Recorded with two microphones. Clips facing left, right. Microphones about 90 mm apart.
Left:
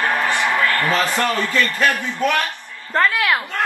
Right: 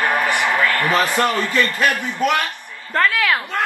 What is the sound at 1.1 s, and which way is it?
A man's voice, 20° right (ahead or behind).